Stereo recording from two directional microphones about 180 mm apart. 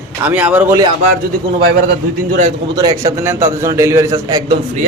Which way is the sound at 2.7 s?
20° right (ahead or behind).